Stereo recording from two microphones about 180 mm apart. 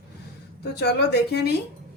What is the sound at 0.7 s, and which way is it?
Speech, 65° left (ahead or behind).